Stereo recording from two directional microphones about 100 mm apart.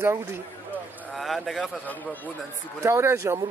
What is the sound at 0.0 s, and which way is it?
Speech, 25° right (ahead or behind).